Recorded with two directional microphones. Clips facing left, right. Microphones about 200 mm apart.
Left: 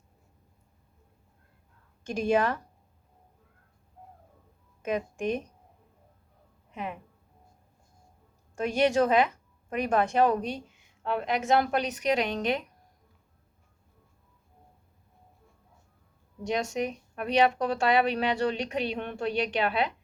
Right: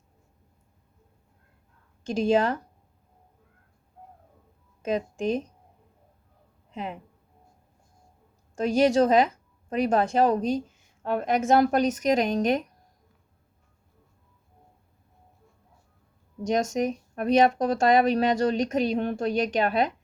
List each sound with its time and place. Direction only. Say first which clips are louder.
2.0 s speech: right 3 dB; 25° right (ahead or behind)
4.9 s speech: right 3 dB; 30° right (ahead or behind)
6.7 s speech: right 2 dB; 30° right (ahead or behind)
8.5 s a woman's voice: right 4 dB; 35° right (ahead or behind)
16.4 s a woman's voice: right 4 dB; 45° right (ahead or behind)